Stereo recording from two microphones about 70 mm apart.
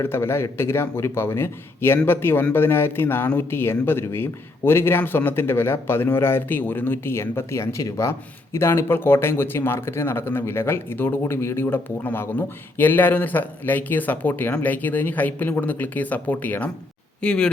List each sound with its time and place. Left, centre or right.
0.0 s speech: left
8.5 s speech: left
17.2 s speech: centre